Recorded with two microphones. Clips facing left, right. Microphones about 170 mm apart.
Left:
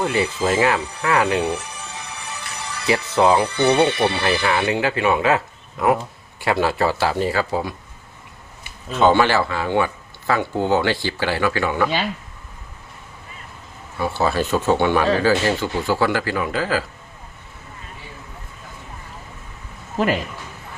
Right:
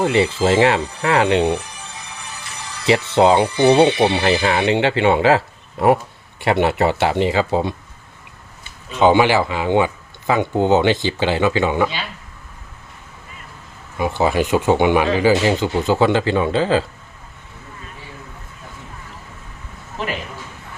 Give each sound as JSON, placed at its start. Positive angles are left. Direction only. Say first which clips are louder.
{"t": 0.0, "sound": "speech", "louder": "right 4 dB", "side_deg": -25}
{"t": 2.8, "sound": "speech", "louder": "right 3 dB", "side_deg": -25}
{"t": 8.9, "sound": "speech", "louder": "right 2 dB", "side_deg": -15}
{"t": 13.9, "sound": "speech", "louder": "right 3 dB", "side_deg": -15}
{"t": 20.0, "sound": "speech", "louder": "left 6 dB", "side_deg": 40}